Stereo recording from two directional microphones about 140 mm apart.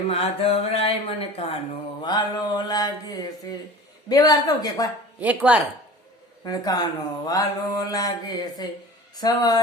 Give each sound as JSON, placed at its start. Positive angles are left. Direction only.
{"t": 0.1, "sound": "speech", "side_deg": 45}
{"t": 5.2, "sound": "speech", "side_deg": -10}
{"t": 6.4, "sound": "a man's voice", "side_deg": 25}